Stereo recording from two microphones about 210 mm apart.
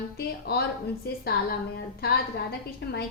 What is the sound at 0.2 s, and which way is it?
A woman's voice, 50° left (ahead or behind).